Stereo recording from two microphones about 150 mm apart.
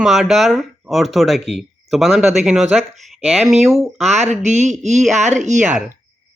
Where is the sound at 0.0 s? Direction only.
Centre (ahead or behind).